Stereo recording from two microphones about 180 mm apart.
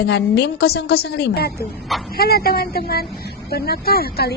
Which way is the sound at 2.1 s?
60° left (ahead or behind).